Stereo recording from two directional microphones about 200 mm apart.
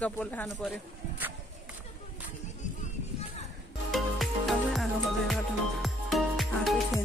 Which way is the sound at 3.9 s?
Centre (ahead or behind).